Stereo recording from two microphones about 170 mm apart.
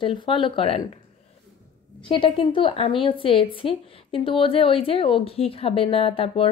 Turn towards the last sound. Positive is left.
turn(degrees=35)  # may be behind; listen again after turning